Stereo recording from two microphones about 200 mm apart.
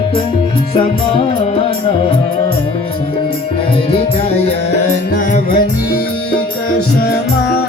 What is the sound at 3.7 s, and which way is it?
Music, 30° left (ahead or behind).